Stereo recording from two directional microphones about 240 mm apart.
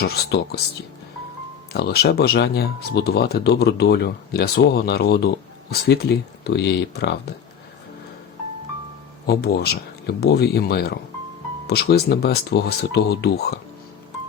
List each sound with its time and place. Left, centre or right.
0.0 s speech: left
1.7 s speech: left
9.2 s speech: left